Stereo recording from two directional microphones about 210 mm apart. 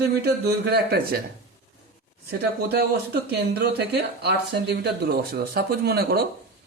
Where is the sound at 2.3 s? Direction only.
50° right (ahead or behind).